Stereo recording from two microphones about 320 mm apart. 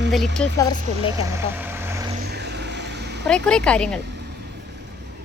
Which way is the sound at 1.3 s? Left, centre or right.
Centre.